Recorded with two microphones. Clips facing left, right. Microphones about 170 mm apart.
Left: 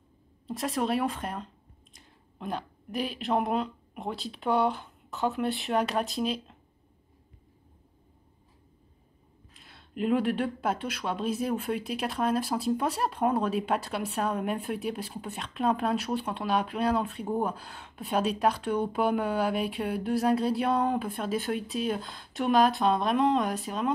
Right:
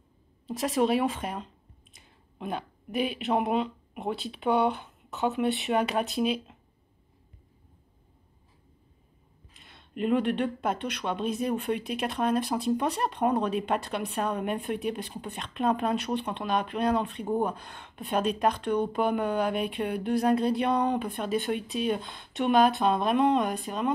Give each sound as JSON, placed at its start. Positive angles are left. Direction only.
{"t": 0.5, "sound": "speech", "side_deg": 0}
{"t": 9.5, "sound": "speech", "side_deg": 0}